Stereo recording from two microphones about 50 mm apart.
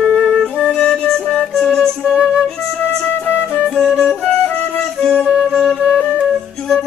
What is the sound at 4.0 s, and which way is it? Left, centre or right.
Music, centre.